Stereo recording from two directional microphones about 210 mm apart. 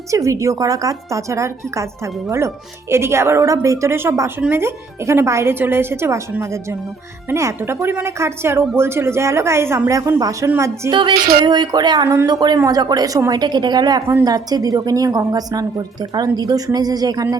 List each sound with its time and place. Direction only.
0.1 s speech: 15° right (ahead or behind)